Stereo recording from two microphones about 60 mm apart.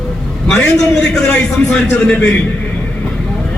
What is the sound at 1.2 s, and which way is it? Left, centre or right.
Speech, centre.